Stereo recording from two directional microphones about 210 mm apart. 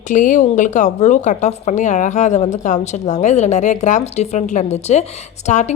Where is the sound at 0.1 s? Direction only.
35° left (ahead or behind).